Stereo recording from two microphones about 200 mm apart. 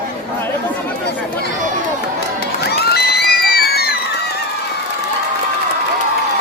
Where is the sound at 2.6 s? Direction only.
55° left (ahead or behind).